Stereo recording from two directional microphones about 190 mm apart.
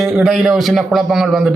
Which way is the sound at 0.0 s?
Centre (ahead or behind).